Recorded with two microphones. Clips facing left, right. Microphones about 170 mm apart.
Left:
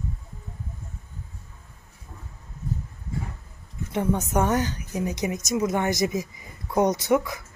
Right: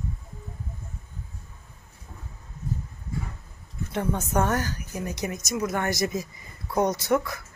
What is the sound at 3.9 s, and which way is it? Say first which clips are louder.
A woman's voice: left 2 dB; 15° left (ahead or behind).